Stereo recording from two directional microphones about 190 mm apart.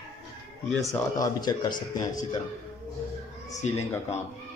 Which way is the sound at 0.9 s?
20° left (ahead or behind).